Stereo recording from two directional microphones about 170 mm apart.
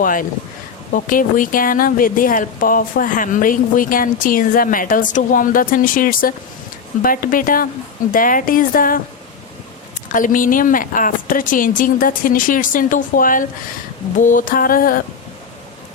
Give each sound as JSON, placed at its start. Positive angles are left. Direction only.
{"t": 0.0, "sound": "speech", "side_deg": 55}
{"t": 10.1, "sound": "speech", "side_deg": 50}